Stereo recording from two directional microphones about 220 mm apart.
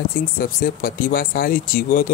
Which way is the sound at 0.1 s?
40° left (ahead or behind).